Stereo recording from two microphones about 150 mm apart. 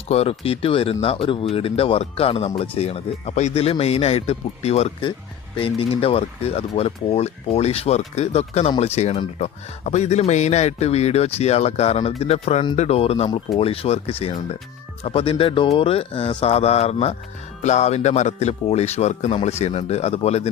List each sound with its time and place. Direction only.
0.1 s speech: 40° left (ahead or behind)